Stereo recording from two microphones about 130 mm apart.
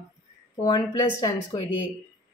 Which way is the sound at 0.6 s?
25° left (ahead or behind).